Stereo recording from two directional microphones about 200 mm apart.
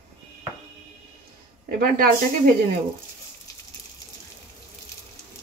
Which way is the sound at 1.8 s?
45° right (ahead or behind).